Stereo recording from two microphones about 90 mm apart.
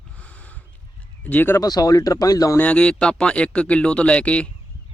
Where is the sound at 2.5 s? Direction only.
15° left (ahead or behind).